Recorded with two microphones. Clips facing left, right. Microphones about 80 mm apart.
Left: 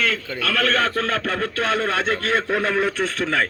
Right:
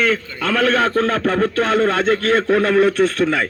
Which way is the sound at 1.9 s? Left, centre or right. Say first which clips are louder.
Right 5 dB; centre.